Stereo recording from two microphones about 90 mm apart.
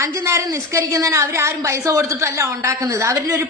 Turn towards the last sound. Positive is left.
turn(degrees=-40)  # may be behind; listen again after turning